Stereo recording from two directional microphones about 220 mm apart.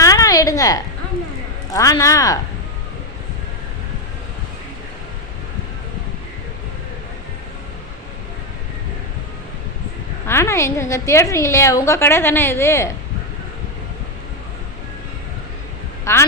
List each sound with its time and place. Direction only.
0.0 s a sound: 15° left (ahead or behind)
1.7 s a woman's voice: 15° left (ahead or behind)
10.2 s a woman's voice: 10° left (ahead or behind)
16.1 s a woman's voice: 15° left (ahead or behind)